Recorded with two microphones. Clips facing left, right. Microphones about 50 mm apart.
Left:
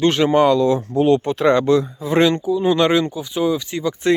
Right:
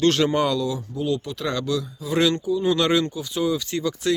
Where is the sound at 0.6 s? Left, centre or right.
Left; by 3.9 s centre.